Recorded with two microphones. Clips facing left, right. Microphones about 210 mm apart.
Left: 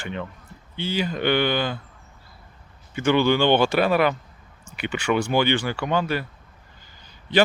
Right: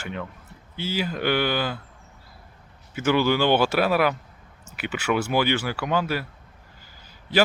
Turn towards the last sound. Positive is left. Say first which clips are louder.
# left 2 dB
turn(degrees=-5)  # may be behind; listen again after turning